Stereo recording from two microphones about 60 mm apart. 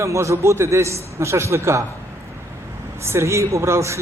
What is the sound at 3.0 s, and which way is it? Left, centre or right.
Speech, right.